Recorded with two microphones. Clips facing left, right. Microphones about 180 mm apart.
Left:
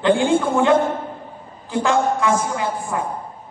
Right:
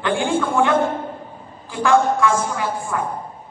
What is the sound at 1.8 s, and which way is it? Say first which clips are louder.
A man's voice: right 3 dB; 20° left (ahead or behind).